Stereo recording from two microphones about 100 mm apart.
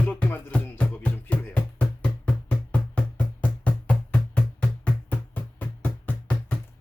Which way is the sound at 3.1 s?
15° left (ahead or behind).